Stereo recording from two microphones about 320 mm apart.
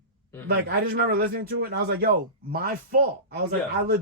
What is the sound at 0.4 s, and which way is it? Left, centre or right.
Speech, right.